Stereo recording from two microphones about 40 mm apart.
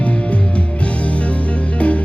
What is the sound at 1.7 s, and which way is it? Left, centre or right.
Music, left.